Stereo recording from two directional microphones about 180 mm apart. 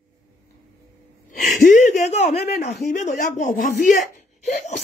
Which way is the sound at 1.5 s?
45° left (ahead or behind).